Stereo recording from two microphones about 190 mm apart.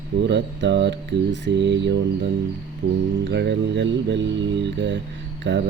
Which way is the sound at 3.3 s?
65° right (ahead or behind).